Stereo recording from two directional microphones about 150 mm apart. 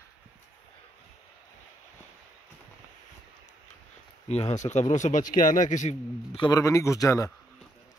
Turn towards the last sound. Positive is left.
turn(degrees=20)  # may be behind; listen again after turning